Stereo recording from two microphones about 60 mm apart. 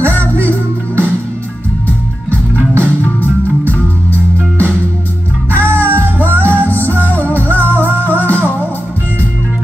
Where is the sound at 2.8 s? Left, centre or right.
Left.